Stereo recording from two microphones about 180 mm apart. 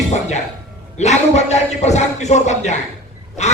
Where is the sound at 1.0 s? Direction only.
40° left (ahead or behind).